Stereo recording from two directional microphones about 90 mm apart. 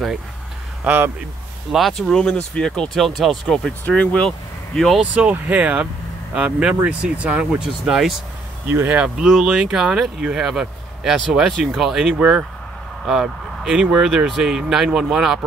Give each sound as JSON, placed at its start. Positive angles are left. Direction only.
{"t": 0.8, "sound": "speech", "side_deg": -20}
{"t": 1.7, "sound": "speech", "side_deg": 0}
{"t": 3.8, "sound": "speech", "side_deg": 15}
{"t": 5.1, "sound": "speech", "side_deg": -15}
{"t": 8.6, "sound": "speech", "side_deg": -25}
{"t": 8.9, "sound": "speech", "side_deg": -10}
{"t": 12.2, "sound": "speech", "side_deg": -15}
{"t": 13.0, "sound": "speech", "side_deg": -5}